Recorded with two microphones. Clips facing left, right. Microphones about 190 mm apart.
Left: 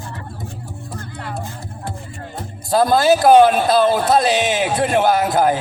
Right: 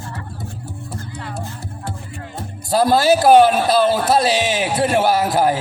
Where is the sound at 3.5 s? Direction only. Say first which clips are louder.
Left 1 dB; 20° left (ahead or behind).